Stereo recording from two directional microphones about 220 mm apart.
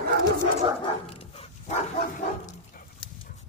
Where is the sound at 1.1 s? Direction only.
25° left (ahead or behind).